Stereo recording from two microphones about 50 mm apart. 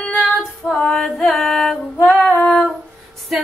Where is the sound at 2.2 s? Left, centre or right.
Left.